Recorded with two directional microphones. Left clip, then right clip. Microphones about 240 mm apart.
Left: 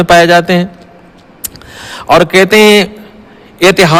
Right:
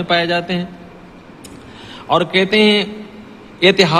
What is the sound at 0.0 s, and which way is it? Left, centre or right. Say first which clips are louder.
Speech: left 11 dB; left.